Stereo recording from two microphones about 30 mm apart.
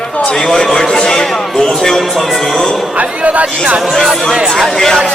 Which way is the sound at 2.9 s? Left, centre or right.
Right.